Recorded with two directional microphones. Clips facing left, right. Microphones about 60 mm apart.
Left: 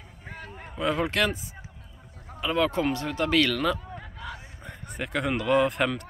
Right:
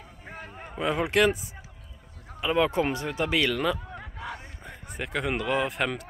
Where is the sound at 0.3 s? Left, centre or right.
Centre.